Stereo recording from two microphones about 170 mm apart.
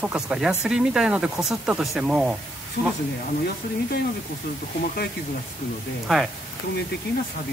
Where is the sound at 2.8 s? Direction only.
70° left (ahead or behind).